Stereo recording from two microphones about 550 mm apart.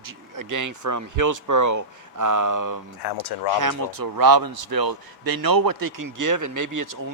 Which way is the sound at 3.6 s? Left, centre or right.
Right.